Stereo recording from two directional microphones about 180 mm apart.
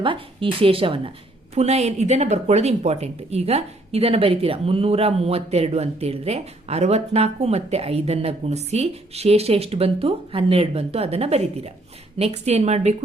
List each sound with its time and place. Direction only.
0.0 s a woman's voice: 30° right (ahead or behind)